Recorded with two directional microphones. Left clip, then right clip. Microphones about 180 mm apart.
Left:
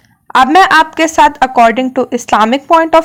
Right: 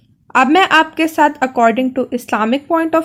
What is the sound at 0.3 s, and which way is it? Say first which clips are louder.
A woman's voice: left 5 dB; 15° left (ahead or behind).